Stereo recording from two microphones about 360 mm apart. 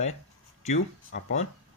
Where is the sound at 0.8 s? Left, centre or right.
Left.